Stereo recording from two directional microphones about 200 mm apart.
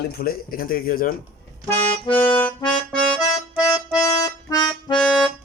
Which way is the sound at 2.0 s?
25° left (ahead or behind).